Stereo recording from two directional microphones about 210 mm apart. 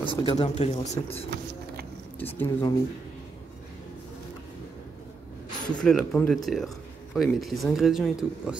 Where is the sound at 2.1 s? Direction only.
10° left (ahead or behind).